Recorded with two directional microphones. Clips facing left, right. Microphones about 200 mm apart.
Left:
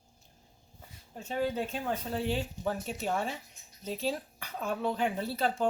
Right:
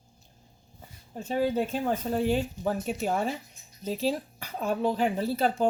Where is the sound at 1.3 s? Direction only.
40° right (ahead or behind).